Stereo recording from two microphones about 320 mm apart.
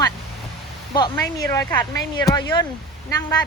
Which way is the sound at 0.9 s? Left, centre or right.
Centre.